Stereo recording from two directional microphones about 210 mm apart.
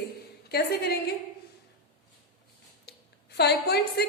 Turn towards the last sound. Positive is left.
turn(degrees=50)  # may be behind; listen again after turning